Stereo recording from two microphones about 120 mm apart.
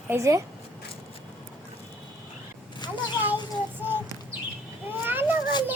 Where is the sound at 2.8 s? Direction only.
40° left (ahead or behind).